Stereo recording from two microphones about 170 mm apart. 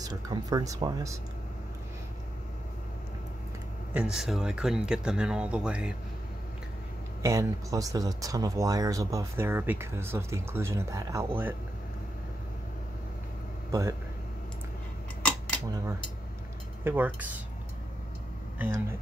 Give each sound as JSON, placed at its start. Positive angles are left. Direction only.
{"t": 0.0, "sound": "speech", "side_deg": -20}
{"t": 3.9, "sound": "speech", "side_deg": -5}
{"t": 7.2, "sound": "speech", "side_deg": -20}
{"t": 13.7, "sound": "speech", "side_deg": -20}
{"t": 16.8, "sound": "speech", "side_deg": -10}
{"t": 18.6, "sound": "speech", "side_deg": -15}